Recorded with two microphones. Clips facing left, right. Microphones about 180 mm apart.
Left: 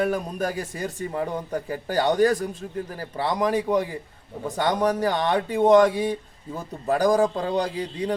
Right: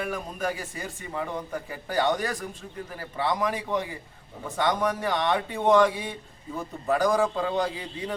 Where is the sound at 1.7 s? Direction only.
35° left (ahead or behind).